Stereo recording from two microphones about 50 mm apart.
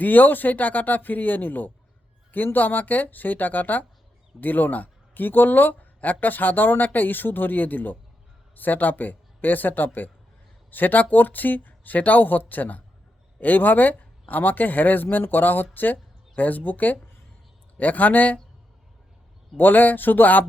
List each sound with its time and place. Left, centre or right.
0.0 s speech: left
19.5 s speech: left